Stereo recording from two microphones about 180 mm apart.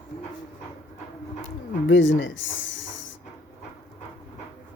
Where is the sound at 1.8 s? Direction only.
90° left.